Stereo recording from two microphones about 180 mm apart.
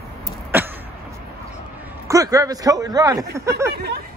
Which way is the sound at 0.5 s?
10° right (ahead or behind).